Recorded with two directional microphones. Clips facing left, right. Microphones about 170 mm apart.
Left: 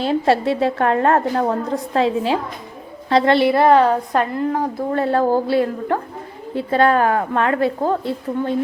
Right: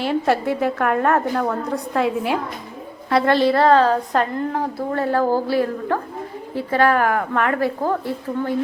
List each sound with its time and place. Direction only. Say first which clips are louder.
0.0 s a woman's voice: left 2 dB; 25° left (ahead or behind)